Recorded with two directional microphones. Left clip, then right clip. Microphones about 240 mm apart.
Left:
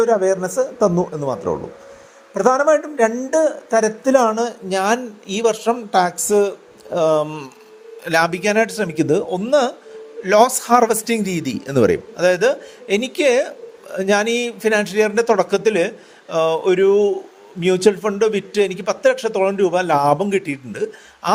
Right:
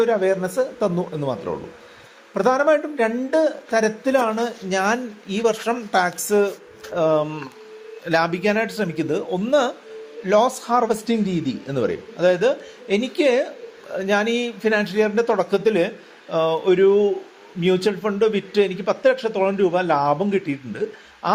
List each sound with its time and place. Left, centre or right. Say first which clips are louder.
0.0 s speech: left 3 dB; left
4.1 s a man's voice: left 7 dB; left